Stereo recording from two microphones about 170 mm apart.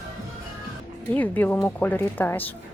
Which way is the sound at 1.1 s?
10° left (ahead or behind).